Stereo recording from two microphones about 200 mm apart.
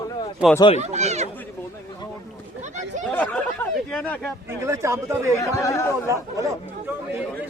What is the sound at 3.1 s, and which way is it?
Chatter, 5° left (ahead or behind).